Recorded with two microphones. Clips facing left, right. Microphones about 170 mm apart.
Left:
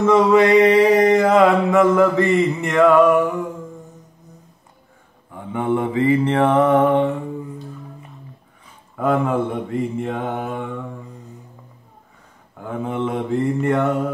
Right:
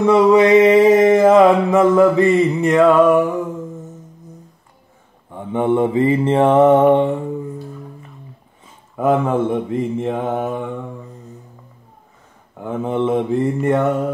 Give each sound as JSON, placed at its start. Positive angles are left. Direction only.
{"t": 0.0, "sound": "mantra", "side_deg": -15}
{"t": 5.3, "sound": "mantra", "side_deg": -25}
{"t": 8.9, "sound": "mantra", "side_deg": -20}
{"t": 12.5, "sound": "mantra", "side_deg": -25}